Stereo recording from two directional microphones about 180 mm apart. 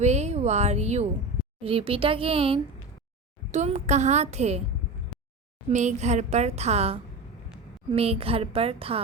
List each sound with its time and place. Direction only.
0.0 s a woman's voice: 40° right (ahead or behind)
5.7 s a woman's voice: 40° right (ahead or behind)